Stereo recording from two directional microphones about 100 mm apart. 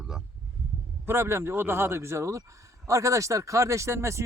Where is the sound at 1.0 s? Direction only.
25° right (ahead or behind).